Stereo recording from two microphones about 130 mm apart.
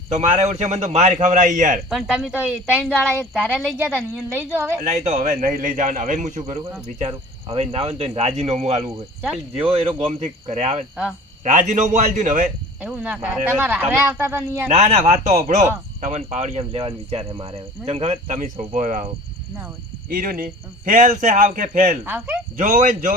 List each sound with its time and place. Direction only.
0.1 s a man's voice: 65° right (ahead or behind); by 1.8 s 80° right
1.9 s speech: 5° right (ahead or behind)
4.8 s a man's voice: 75° right (ahead or behind)
6.8 s speech: 55° right (ahead or behind)
11.4 s a man's voice: 70° right (ahead or behind)
12.8 s speech: 10° right (ahead or behind)
14.7 s speech: 60° right (ahead or behind); by 19.0 s 90° right
20.1 s a man's voice: 90° right
22.0 s speech: 15° right (ahead or behind)
22.5 s a man's voice: 85° right